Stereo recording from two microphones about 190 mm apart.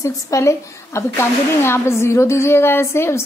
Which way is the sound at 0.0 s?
15° left (ahead or behind).